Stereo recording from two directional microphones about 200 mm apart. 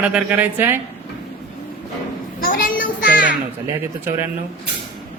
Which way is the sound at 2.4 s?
45° left (ahead or behind).